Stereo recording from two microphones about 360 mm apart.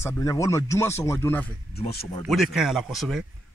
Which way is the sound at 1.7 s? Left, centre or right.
Left.